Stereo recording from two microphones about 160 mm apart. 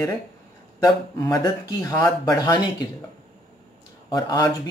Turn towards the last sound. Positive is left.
turn(degrees=25)  # may be behind; listen again after turning